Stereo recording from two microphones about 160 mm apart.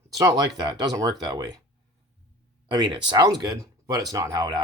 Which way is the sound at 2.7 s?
30° right (ahead or behind).